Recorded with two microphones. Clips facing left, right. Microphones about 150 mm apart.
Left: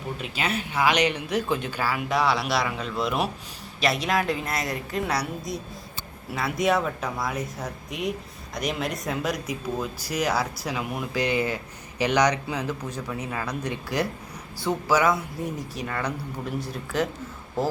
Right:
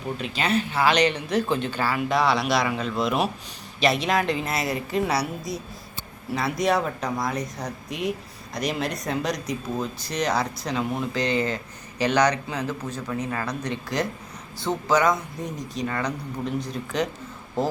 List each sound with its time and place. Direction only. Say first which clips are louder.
0.2 s a woman's voice: right 5 dB; 10° left (ahead or behind)